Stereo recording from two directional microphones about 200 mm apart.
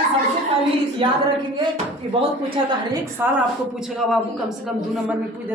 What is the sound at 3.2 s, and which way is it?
Speech, 10° right (ahead or behind).